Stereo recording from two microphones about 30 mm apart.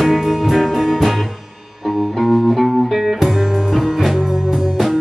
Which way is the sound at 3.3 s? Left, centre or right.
Centre.